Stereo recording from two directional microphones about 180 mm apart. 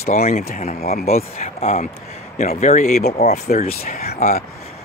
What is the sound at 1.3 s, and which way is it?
Speech, 35° left (ahead or behind).